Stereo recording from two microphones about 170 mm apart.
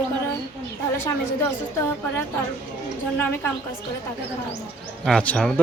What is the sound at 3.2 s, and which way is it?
Speech, 10° left (ahead or behind).